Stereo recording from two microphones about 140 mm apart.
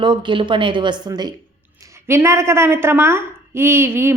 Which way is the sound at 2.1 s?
20° right (ahead or behind).